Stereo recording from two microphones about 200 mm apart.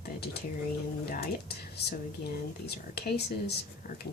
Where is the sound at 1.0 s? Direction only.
50° left (ahead or behind).